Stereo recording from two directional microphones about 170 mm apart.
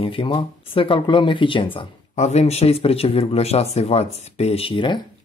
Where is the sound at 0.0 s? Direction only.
30° left (ahead or behind).